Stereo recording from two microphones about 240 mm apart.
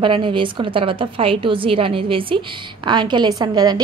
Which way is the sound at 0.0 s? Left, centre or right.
Right.